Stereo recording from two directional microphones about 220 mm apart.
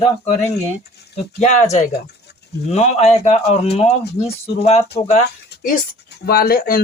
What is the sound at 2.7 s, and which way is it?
Speech, 30° left (ahead or behind).